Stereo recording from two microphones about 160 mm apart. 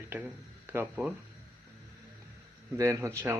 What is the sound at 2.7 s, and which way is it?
Speech, 20° right (ahead or behind).